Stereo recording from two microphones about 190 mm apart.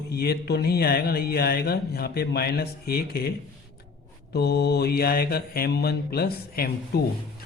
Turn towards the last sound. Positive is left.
turn(degrees=55)  # may be behind; listen again after turning